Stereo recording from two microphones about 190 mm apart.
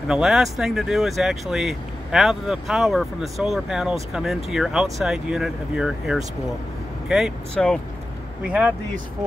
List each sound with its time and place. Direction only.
0.1 s speech: centre (ahead or behind)
8.5 s speech: 5° right (ahead or behind)